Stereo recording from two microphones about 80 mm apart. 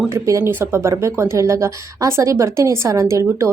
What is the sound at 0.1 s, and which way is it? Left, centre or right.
A woman's voice, right.